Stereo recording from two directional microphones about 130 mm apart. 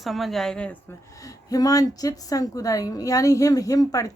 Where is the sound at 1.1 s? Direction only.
25° left (ahead or behind).